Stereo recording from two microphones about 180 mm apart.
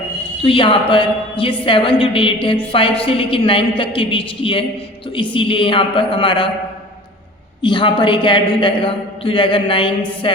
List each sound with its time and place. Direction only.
0.4 s a woman's voice: 30° left (ahead or behind)
7.6 s a woman's voice: 25° left (ahead or behind)